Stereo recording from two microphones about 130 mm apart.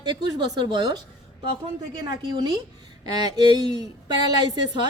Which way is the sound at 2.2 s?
40° right (ahead or behind).